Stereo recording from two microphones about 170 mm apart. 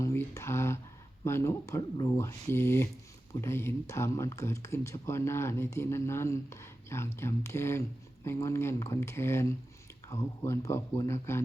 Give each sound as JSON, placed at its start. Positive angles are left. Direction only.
{"t": 0.0, "sound": "speech", "side_deg": 15}